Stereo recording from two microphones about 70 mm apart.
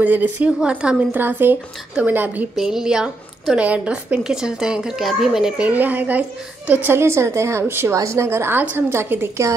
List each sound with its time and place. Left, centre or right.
0.0 s a woman's voice: right
0.5 s a woman's voice: centre
1.1 s a woman's voice: right
2.5 s a woman's voice: centre
5.6 s a woman's voice: right
7.9 s a woman's voice: right